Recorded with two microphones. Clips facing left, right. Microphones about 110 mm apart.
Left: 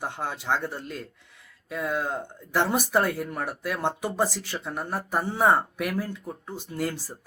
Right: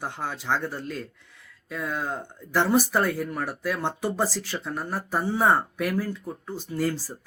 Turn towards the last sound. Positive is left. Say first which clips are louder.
# right 3 dB
turn(degrees=15)  # may be behind; listen again after turning